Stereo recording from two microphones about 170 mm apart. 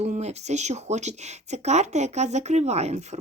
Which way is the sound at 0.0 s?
40° right (ahead or behind).